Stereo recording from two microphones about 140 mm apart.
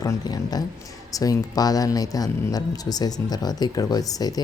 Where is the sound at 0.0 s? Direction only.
30° left (ahead or behind).